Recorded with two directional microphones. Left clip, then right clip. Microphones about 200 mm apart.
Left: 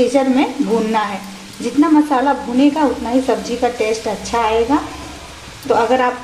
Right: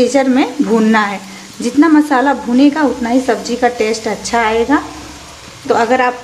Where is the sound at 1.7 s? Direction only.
25° right (ahead or behind).